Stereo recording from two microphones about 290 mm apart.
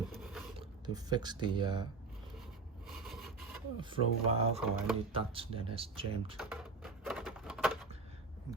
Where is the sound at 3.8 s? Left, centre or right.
Centre.